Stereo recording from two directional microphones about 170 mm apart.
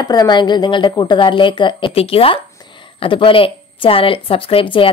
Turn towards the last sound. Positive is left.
turn(degrees=30)  # may be behind; listen again after turning